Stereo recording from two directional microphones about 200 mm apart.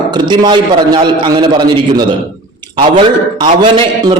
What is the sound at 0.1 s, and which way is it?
Speech, 20° right (ahead or behind).